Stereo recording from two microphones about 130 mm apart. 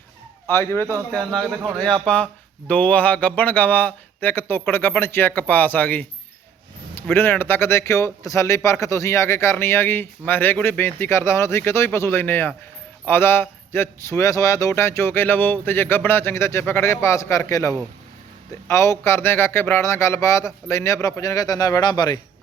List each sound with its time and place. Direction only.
0.4 s speech: 20° left (ahead or behind)
1.1 s a man's voice: 5° left (ahead or behind); by 22.2 s 35° left (ahead or behind)